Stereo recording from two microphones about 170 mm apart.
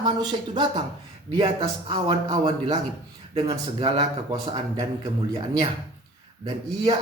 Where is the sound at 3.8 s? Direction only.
30° right (ahead or behind).